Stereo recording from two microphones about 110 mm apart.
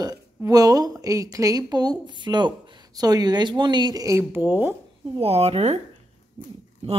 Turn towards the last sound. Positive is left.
turn(degrees=-55)  # may be behind; listen again after turning